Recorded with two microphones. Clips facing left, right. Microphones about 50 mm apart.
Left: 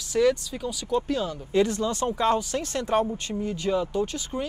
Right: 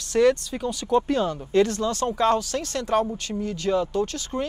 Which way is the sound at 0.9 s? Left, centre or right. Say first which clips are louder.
Right 4 dB; centre.